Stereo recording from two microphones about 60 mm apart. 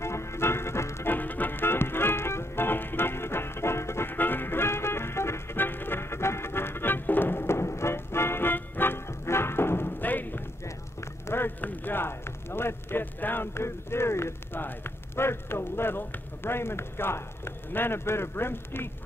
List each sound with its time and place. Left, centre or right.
0.0 s music: left
1.1 s music: left
11.2 s a sound: left